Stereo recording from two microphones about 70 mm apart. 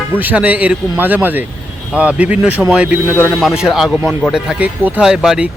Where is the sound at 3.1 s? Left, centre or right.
Left.